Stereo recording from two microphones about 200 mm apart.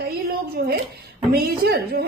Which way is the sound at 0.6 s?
50° right (ahead or behind).